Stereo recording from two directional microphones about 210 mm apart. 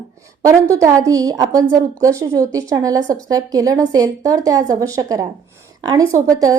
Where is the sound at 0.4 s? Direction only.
15° right (ahead or behind).